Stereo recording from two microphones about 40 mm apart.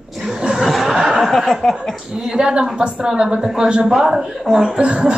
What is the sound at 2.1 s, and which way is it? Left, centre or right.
Speech, centre.